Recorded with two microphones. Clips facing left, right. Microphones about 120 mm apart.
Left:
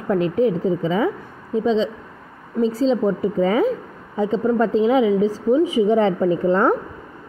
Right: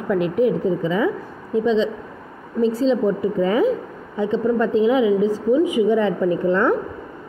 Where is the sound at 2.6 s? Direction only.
30° left (ahead or behind).